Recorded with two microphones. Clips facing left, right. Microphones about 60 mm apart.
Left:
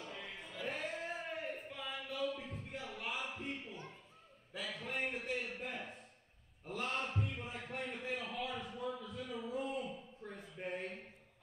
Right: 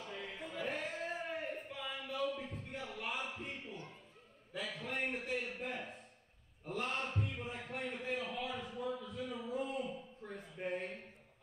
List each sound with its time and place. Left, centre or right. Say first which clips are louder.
0.0 s music: right 2 dB; centre
0.4 s music: right 4 dB; right
0.7 s a sound: even; centre